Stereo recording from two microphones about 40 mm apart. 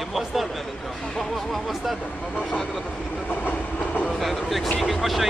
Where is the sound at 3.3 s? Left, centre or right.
Left.